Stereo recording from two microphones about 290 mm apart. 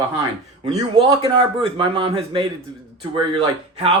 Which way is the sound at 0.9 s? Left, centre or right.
Centre.